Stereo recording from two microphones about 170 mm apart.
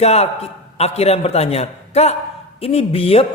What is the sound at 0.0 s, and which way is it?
A man's voice, 40° left (ahead or behind).